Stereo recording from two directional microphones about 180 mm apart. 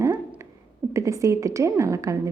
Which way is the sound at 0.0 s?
10° right (ahead or behind).